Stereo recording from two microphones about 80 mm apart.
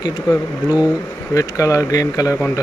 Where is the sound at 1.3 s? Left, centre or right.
Left.